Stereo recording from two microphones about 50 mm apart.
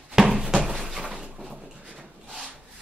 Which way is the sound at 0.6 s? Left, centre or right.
Centre.